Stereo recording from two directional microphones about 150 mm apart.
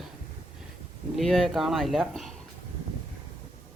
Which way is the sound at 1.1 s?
Centre (ahead or behind).